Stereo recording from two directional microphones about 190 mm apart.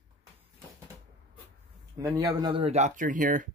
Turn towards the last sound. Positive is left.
turn(degrees=-45)  # may be behind; listen again after turning